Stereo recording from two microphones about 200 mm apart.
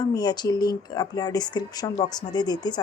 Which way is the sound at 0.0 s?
20° left (ahead or behind).